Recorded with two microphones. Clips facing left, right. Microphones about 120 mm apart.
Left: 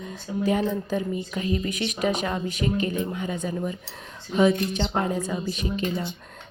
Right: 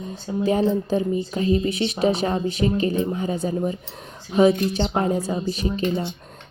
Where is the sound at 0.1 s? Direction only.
30° right (ahead or behind).